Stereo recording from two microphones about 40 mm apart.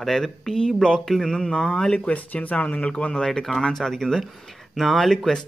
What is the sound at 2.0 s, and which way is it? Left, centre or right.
Speech, left.